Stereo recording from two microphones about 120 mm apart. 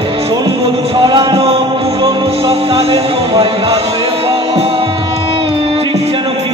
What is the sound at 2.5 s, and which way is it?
Music, 50° right (ahead or behind).